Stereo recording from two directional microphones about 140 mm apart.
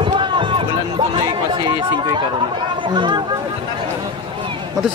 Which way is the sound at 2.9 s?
35° right (ahead or behind).